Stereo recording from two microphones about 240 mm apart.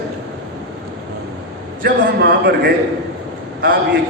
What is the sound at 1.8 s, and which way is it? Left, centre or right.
Speech, right.